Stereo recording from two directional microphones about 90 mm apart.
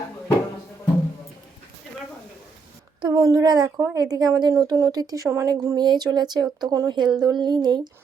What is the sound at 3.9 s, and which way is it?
A woman's voice, 40° right (ahead or behind).